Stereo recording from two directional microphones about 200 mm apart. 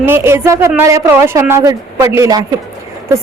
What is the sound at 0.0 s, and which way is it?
A woman's voice, 10° right (ahead or behind).